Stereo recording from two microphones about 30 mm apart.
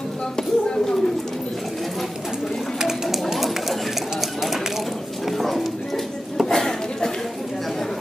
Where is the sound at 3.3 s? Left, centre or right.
Centre.